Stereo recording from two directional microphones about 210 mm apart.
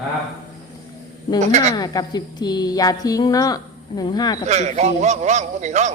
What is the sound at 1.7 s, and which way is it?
A woman's voice, 15° left (ahead or behind).